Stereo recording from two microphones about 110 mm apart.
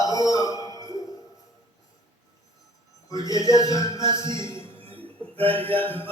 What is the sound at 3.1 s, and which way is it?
Mantra, 30° left (ahead or behind).